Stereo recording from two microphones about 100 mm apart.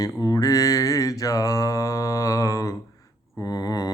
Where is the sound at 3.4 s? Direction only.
40° left (ahead or behind).